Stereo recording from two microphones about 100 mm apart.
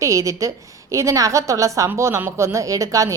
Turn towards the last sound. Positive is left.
turn(degrees=-35)  # may be behind; listen again after turning